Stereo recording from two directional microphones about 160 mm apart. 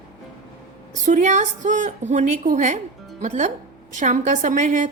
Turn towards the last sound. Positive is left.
turn(degrees=-50)  # may be behind; listen again after turning